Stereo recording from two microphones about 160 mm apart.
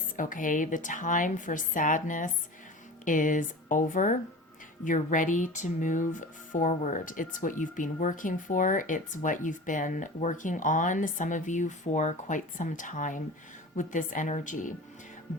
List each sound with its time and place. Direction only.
0.2 s a woman's voice: 55° left (ahead or behind)